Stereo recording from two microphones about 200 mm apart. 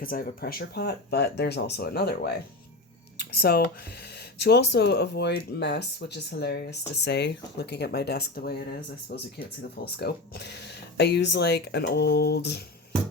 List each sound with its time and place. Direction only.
0.0 s speech: 45° left (ahead or behind)